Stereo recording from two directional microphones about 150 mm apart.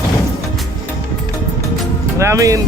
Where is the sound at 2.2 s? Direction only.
20° right (ahead or behind).